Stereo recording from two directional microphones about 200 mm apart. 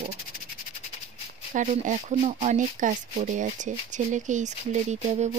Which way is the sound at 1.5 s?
40° right (ahead or behind).